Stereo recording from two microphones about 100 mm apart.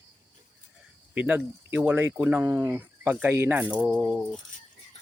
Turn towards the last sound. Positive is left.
turn(degrees=-10)  # may be behind; listen again after turning